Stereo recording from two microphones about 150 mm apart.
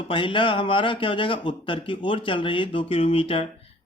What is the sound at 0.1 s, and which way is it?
A man's voice, 35° left (ahead or behind).